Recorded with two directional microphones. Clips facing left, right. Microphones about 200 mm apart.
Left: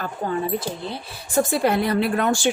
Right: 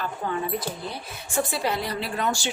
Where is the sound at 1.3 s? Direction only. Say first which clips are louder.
Left 7 dB; 45° left (ahead or behind).